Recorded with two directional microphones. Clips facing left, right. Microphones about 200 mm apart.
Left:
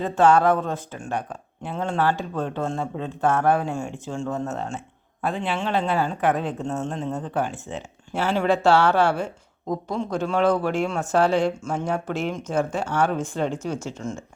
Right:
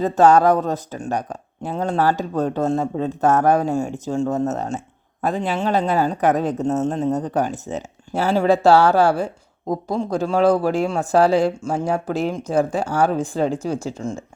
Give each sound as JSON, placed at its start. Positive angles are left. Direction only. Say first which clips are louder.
{"t": 0.0, "sound": "speech", "louder": "right 4 dB", "side_deg": -40}